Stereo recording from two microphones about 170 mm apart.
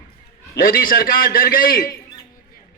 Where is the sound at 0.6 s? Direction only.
60° left (ahead or behind).